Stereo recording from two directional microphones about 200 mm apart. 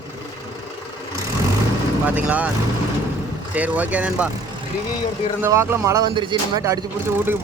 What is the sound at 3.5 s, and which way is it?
Speech, 5° right (ahead or behind).